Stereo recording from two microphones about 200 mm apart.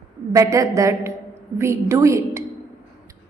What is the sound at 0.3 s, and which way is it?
A woman's voice, 15° right (ahead or behind).